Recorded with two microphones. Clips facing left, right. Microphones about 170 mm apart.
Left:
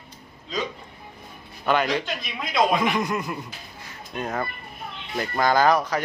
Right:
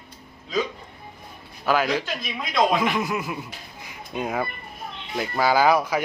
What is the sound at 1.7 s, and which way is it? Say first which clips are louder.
A man's voice: even; 5° right (ahead or behind).